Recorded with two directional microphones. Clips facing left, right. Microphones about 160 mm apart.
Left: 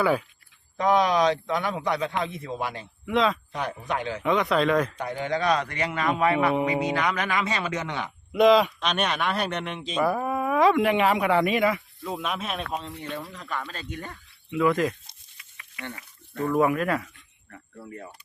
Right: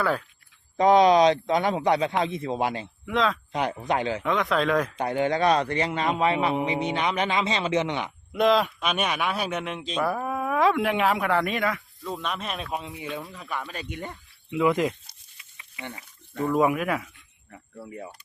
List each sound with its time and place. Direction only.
0.0 s speech: 10° left (ahead or behind)
0.8 s a man's voice: 25° right (ahead or behind)
3.1 s speech: centre (ahead or behind)
3.5 s a man's voice: 25° right (ahead or behind)
4.2 s speech: centre (ahead or behind)
5.3 s a man's voice: 30° right (ahead or behind)
8.3 s speech: centre (ahead or behind)